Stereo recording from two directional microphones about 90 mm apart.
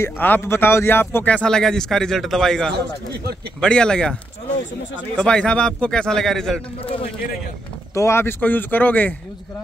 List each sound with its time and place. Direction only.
0.0 s a man's voice: 25° left (ahead or behind); by 6.6 s 5° left (ahead or behind)
6.8 s speech: 90° left
7.9 s speech: 30° left (ahead or behind)